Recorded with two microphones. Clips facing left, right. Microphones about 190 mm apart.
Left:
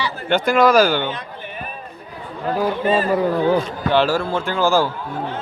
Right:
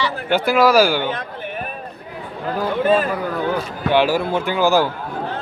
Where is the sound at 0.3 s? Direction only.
5° right (ahead or behind).